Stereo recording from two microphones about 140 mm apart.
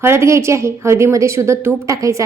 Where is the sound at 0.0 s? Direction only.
20° right (ahead or behind).